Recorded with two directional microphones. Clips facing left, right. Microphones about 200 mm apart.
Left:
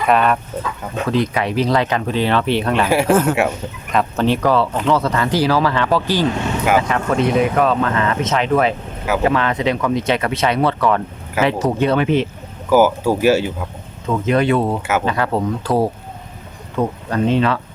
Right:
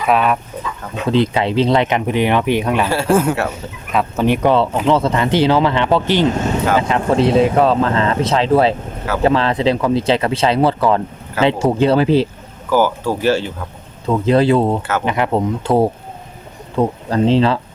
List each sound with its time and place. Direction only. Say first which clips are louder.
0.0 s speech: even; 5° right (ahead or behind)
1.0 s speech: right 3 dB; 25° right (ahead or behind); by 4.4 s 10° right (ahead or behind)
4.4 s speech: right 4 dB; 25° right (ahead or behind)
12.7 s speech: left 2 dB; 10° left (ahead or behind)
14.1 s speech: right 3 dB; 30° right (ahead or behind)
14.8 s speech: left 1 dB; 10° left (ahead or behind)
15.0 s speech: right 2 dB; 20° right (ahead or behind)